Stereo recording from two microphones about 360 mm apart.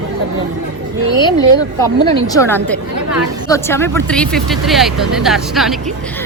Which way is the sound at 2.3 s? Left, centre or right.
Centre.